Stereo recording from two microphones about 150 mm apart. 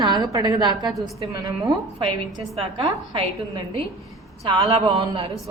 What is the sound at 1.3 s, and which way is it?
Speech, 25° right (ahead or behind).